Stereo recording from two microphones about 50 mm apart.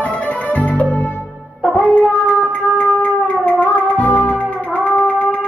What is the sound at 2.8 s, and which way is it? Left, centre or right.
Music, left.